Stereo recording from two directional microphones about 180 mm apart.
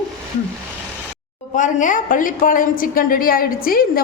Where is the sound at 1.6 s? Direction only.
45° left (ahead or behind).